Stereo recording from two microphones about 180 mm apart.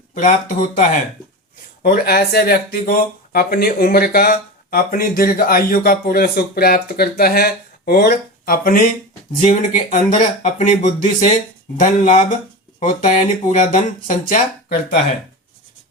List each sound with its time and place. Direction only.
0.1 s speech: 50° left (ahead or behind)